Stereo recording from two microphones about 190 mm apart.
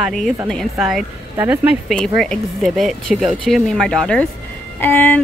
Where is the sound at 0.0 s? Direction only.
5° left (ahead or behind).